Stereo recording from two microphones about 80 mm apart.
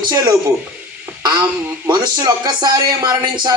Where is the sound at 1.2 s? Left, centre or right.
Right.